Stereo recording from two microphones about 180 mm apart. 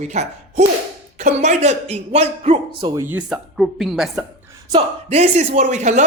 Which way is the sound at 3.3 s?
Centre (ahead or behind).